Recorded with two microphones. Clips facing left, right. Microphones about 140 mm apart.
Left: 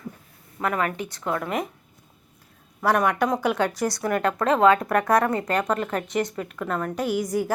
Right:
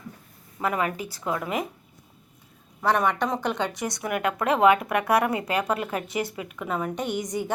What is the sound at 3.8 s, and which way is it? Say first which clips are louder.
Speech: left 5 dB; 20° right (ahead or behind).